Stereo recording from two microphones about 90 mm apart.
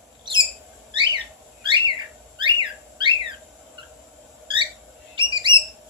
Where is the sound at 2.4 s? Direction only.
65° right (ahead or behind).